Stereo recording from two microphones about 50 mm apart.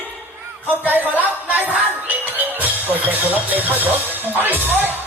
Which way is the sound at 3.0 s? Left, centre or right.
Right.